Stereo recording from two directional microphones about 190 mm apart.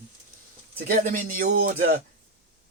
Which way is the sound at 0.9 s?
45° right (ahead or behind).